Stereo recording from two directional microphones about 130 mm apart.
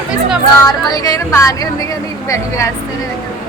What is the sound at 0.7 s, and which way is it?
Speech, 25° left (ahead or behind).